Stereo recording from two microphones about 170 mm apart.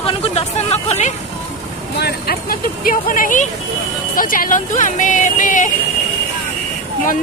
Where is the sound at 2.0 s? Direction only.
65° left (ahead or behind); by 5.7 s 50° left (ahead or behind).